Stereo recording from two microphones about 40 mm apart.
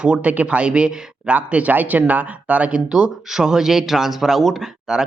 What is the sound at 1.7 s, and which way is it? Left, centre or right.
Speech, right.